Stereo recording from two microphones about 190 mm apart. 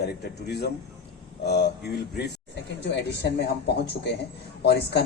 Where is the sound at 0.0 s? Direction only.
60° left (ahead or behind).